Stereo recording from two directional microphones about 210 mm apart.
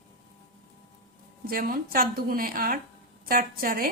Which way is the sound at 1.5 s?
45° right (ahead or behind).